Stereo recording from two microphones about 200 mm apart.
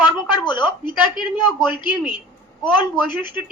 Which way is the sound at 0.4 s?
20° left (ahead or behind).